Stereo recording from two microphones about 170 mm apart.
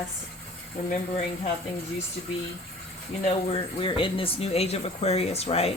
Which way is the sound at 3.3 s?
35° left (ahead or behind).